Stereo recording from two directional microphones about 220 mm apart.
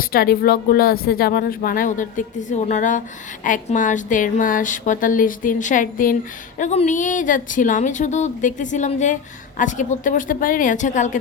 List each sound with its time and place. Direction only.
0.0 s speech: 45° left (ahead or behind)